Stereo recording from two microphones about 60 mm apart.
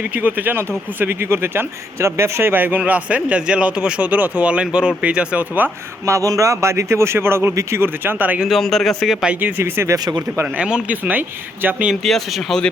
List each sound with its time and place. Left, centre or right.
0.1 s speech: right
2.5 s a man's voice: right
6.1 s speech: right
8.0 s a man's voice: right
8.4 s speech: centre
9.4 s speech: right
10.6 s speech: centre
10.8 s speech: right
12.0 s speech: centre